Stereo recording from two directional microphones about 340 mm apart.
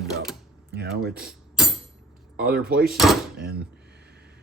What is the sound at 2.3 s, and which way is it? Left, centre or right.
Speech, right.